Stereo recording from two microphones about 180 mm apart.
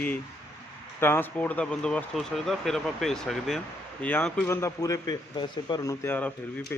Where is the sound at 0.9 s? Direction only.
10° left (ahead or behind).